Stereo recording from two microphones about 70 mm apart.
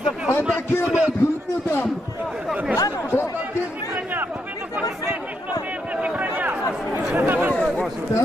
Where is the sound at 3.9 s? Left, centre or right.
Right.